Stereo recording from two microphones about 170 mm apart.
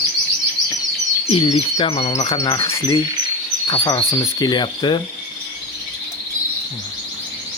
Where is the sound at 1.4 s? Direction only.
35° left (ahead or behind).